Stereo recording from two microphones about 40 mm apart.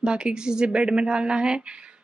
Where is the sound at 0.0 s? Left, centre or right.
Right.